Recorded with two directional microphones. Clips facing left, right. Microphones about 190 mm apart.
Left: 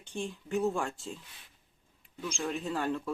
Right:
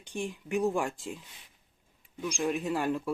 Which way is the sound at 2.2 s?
15° right (ahead or behind).